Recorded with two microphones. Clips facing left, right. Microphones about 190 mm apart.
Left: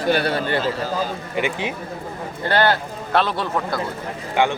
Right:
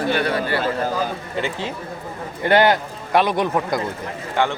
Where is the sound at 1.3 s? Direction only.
15° left (ahead or behind).